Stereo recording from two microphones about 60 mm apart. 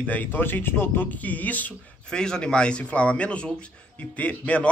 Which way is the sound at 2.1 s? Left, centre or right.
Centre.